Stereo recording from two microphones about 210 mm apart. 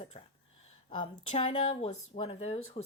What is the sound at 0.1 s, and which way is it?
A woman's voice, 25° left (ahead or behind).